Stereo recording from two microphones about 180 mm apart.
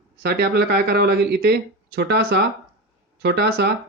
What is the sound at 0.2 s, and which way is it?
Speech, 65° right (ahead or behind).